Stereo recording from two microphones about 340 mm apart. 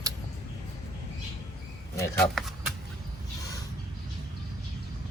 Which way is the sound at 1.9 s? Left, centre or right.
Centre.